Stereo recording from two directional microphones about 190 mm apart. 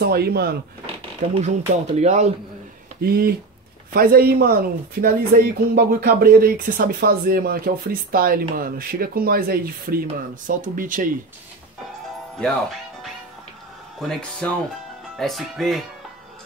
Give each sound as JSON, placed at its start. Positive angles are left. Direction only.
{"t": 0.0, "sound": "speech", "side_deg": -55}
{"t": 0.8, "sound": "speech", "side_deg": -35}
{"t": 3.0, "sound": "speech", "side_deg": -55}
{"t": 13.9, "sound": "speech", "side_deg": 0}